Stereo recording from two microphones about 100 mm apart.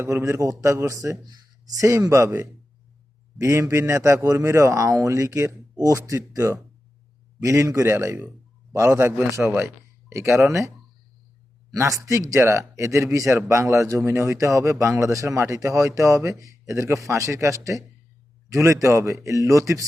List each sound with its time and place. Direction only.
0.0 s speech: 25° right (ahead or behind)
11.7 s speech: 35° right (ahead or behind)